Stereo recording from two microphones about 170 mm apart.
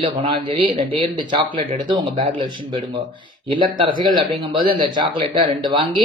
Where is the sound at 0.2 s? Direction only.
30° right (ahead or behind).